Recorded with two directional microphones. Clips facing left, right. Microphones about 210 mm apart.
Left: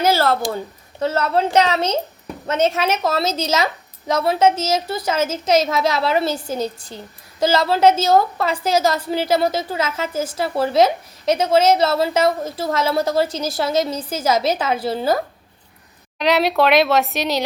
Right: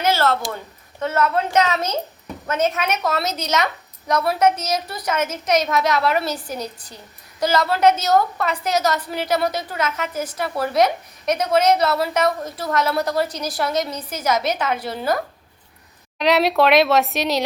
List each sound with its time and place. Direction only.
0.0 s a sound: 35° left (ahead or behind)
0.9 s a woman's voice: 30° left (ahead or behind)
16.1 s a woman's voice: centre (ahead or behind)